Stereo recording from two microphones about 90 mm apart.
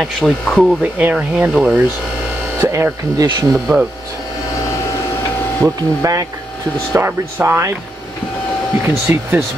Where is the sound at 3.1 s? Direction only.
40° right (ahead or behind).